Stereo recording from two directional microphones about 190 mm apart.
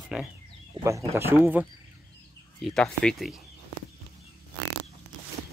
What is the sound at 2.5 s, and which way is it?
Speech, centre (ahead or behind).